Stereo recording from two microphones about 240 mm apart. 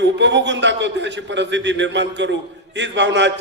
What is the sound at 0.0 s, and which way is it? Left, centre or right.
A man's voice, right.